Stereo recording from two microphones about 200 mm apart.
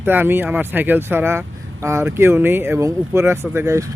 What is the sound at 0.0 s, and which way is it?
Speech, 10° right (ahead or behind).